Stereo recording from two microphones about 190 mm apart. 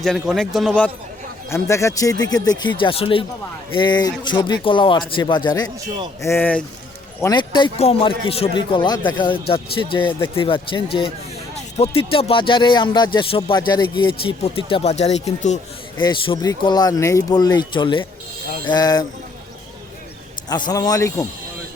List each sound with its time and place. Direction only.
0.0 s a man's voice: centre (ahead or behind)
1.5 s speech: 15° left (ahead or behind)
6.2 s speech: 10° left (ahead or behind)
7.2 s speech: 20° left (ahead or behind)
20.5 s speech: 20° left (ahead or behind)